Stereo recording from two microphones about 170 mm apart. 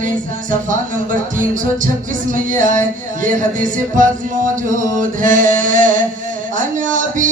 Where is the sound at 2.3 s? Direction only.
50° right (ahead or behind).